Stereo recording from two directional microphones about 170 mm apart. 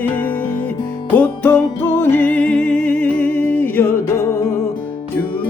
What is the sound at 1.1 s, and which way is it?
Music, 10° left (ahead or behind).